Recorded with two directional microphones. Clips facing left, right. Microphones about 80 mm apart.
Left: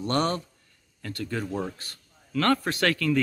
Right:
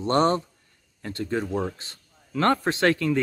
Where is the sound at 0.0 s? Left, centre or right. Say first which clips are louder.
Right 5 dB; right.